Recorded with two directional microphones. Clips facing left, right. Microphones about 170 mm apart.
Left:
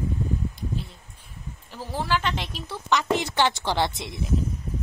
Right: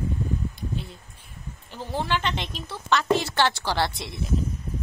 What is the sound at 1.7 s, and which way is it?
A woman's voice, 5° left (ahead or behind).